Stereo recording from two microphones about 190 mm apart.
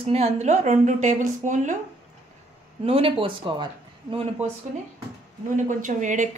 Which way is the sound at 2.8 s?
30° right (ahead or behind).